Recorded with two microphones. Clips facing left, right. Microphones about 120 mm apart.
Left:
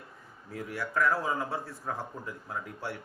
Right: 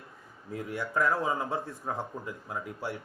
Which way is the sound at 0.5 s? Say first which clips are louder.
Right 1 dB; 20° right (ahead or behind).